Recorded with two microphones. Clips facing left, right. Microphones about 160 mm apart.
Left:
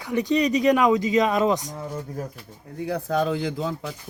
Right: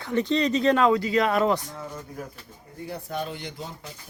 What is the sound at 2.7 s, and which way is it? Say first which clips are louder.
Speech: left 8 dB; 90° left.